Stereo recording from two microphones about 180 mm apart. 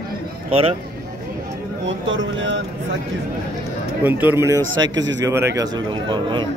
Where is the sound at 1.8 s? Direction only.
90° right.